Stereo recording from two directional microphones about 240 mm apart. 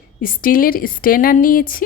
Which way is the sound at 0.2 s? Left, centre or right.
Left.